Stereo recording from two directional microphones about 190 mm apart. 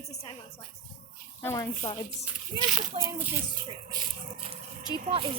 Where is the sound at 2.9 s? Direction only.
30° right (ahead or behind).